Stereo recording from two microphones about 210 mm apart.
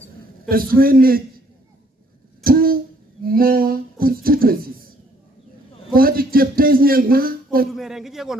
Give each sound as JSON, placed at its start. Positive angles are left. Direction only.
{"t": 0.5, "sound": "a man's voice", "side_deg": -45}
{"t": 2.4, "sound": "a sound", "side_deg": -45}
{"t": 5.9, "sound": "a man's voice", "side_deg": -45}
{"t": 7.7, "sound": "a man's voice", "side_deg": 0}